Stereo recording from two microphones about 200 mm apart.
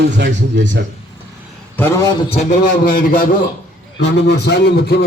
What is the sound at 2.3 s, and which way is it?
A man's voice, 40° left (ahead or behind).